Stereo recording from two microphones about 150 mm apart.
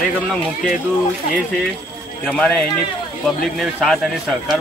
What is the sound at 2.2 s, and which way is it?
Speech, 5° left (ahead or behind).